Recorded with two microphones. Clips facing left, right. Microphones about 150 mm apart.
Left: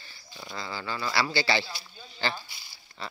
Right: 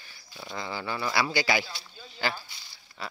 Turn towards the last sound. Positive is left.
turn(degrees=-5)  # may be behind; listen again after turning